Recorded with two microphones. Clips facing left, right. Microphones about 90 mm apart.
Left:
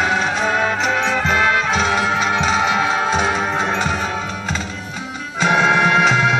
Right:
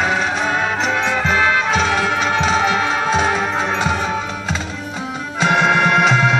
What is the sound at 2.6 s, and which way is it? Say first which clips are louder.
Music: even; 15° left (ahead or behind).